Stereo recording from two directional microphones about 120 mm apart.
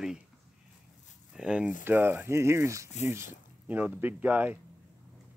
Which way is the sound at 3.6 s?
15° right (ahead or behind).